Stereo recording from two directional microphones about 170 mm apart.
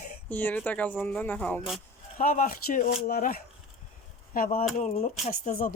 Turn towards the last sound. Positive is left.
turn(degrees=45)  # may be behind; listen again after turning